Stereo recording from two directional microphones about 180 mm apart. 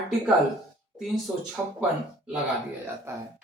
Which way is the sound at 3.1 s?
15° right (ahead or behind).